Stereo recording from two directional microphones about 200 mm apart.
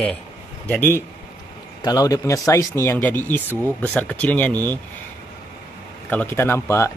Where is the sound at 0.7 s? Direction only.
10° left (ahead or behind).